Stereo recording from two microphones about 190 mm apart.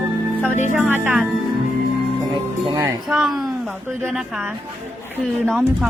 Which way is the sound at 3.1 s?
Centre (ahead or behind).